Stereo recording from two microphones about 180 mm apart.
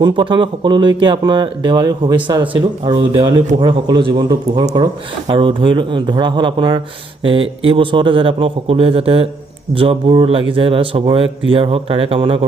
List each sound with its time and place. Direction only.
0.0 s a man's voice: 25° right (ahead or behind)